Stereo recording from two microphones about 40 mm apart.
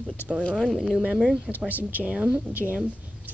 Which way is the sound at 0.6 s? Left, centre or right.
Centre.